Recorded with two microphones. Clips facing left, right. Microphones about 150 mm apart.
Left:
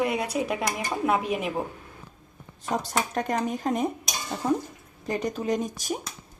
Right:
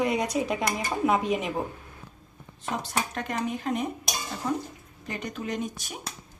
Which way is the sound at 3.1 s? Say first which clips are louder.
Left 4 dB; 40° left (ahead or behind).